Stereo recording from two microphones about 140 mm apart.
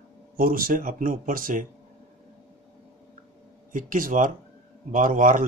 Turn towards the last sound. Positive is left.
turn(degrees=-70)  # may be behind; listen again after turning